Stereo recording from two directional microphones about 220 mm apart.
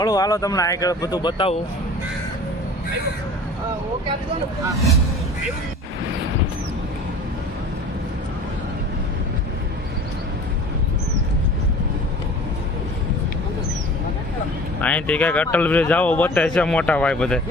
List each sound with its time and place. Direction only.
0.0 s a man's voice: 15° left (ahead or behind)
14.8 s a man's voice: 5° left (ahead or behind)